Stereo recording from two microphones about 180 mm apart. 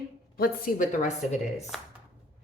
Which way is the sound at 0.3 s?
55° left (ahead or behind).